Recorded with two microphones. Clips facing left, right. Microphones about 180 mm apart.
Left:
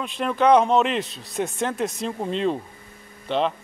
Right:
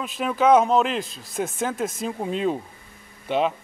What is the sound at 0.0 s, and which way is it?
Speech, 5° right (ahead or behind).